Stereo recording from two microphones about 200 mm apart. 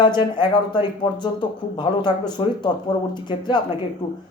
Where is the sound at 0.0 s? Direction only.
20° left (ahead or behind).